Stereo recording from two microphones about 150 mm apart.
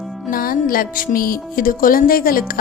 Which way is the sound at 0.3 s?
75° left (ahead or behind).